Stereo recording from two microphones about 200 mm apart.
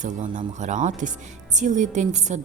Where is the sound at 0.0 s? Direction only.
40° right (ahead or behind).